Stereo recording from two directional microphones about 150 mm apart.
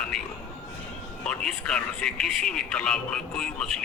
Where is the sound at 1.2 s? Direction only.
5° left (ahead or behind).